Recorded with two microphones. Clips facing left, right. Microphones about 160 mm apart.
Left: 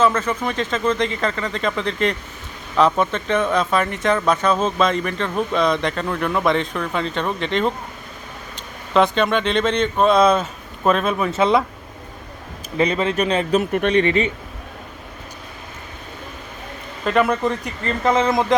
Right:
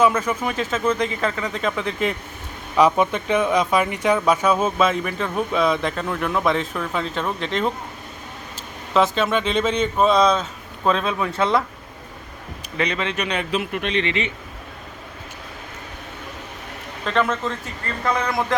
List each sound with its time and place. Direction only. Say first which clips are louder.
0.0 s speech: even; 10° right (ahead or behind)
8.9 s speech: left 2 dB; centre (ahead or behind); by 11.6 s 20° left (ahead or behind)
12.7 s speech: left 5 dB; 40° left (ahead or behind)
17.1 s speech: left 4 dB; 10° left (ahead or behind)